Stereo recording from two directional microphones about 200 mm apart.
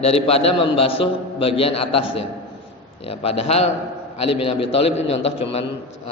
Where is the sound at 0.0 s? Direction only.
30° left (ahead or behind).